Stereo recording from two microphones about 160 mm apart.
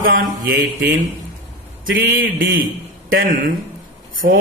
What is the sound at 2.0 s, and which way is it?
A man's voice, 65° right (ahead or behind).